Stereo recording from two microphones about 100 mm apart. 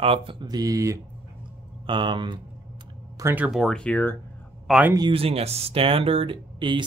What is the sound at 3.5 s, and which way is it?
Speech, 5° left (ahead or behind).